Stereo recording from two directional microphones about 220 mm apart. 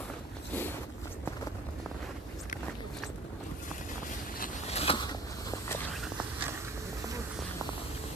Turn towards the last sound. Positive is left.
turn(degrees=-5)  # may be behind; listen again after turning